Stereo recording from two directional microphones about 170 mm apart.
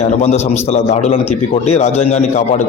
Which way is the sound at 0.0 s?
40° left (ahead or behind).